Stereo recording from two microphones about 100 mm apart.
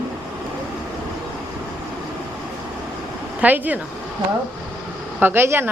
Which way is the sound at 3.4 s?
15° right (ahead or behind).